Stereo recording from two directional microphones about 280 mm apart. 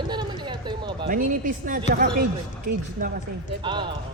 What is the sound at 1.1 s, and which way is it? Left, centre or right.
Speech, right.